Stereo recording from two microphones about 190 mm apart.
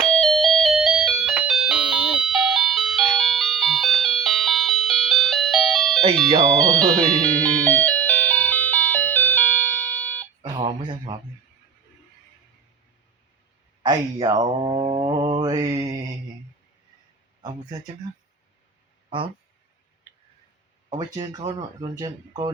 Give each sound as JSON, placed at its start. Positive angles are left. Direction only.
{"t": 0.0, "sound": "music", "side_deg": 0}
{"t": 6.2, "sound": "speech", "side_deg": -25}
{"t": 6.6, "sound": "music", "side_deg": 5}
{"t": 10.4, "sound": "telephone dialing", "side_deg": -25}
{"t": 13.8, "sound": "speech", "side_deg": -20}
{"t": 17.4, "sound": "speech", "side_deg": -20}
{"t": 20.9, "sound": "speech", "side_deg": -20}